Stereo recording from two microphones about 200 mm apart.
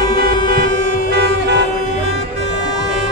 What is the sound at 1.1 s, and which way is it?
Music, 55° right (ahead or behind).